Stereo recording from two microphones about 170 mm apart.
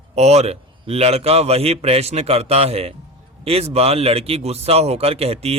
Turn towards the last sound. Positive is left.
turn(degrees=-35)  # may be behind; listen again after turning